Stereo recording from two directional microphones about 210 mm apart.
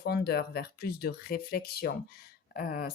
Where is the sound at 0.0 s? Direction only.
50° left (ahead or behind).